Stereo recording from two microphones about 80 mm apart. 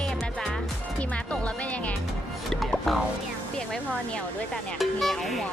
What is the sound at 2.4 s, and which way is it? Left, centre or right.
Speech, centre.